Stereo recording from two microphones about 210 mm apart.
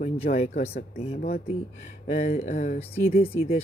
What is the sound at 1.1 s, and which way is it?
Speech, 45° left (ahead or behind).